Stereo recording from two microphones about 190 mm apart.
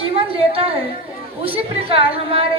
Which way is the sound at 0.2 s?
30° right (ahead or behind).